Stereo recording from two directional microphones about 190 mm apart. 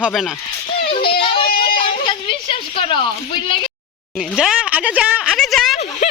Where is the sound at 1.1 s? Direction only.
30° left (ahead or behind).